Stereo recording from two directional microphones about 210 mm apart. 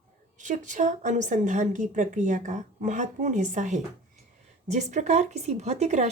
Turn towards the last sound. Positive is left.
turn(degrees=-35)  # may be behind; listen again after turning